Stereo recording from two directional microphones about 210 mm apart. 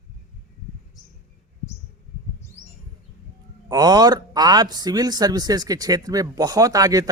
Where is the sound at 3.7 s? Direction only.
20° right (ahead or behind).